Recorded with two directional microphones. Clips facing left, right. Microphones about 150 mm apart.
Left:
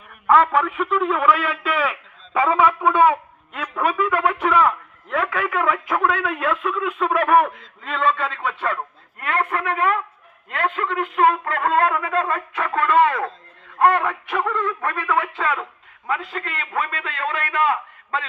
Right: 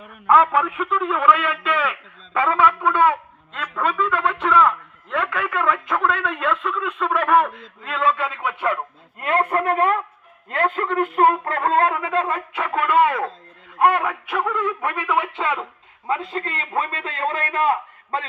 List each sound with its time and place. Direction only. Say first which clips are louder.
0.3 s a man's voice: even; centre (ahead or behind)
9.2 s a man's voice: right 3 dB; 35° right (ahead or behind)
11.9 s a sound: even; 15° right (ahead or behind)
16.0 s a man's voice: right 2 dB; 30° right (ahead or behind)